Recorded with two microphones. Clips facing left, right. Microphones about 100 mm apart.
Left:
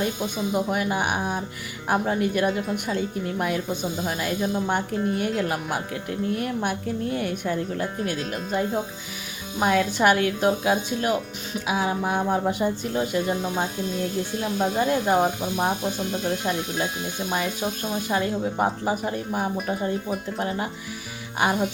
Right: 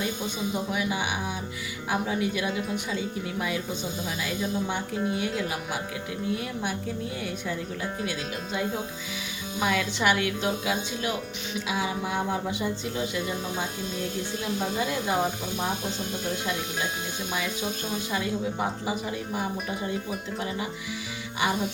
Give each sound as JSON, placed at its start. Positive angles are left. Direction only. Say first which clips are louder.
{"t": 0.5, "sound": "speech", "louder": "left 6 dB", "side_deg": 50}
{"t": 9.6, "sound": "speech", "louder": "left 6 dB", "side_deg": 45}
{"t": 17.3, "sound": "speech", "louder": "left 4 dB", "side_deg": 50}